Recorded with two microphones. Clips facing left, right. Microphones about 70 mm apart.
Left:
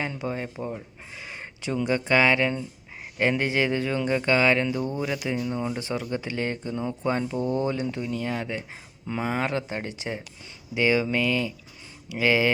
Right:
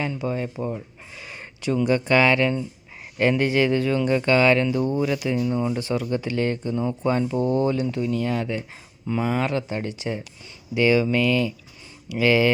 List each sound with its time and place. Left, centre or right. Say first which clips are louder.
0.1 s speech: right 4 dB; left
6.7 s speech: right 3 dB; right
7.6 s speech: right 5 dB; left
9.0 s speech: right 3 dB; left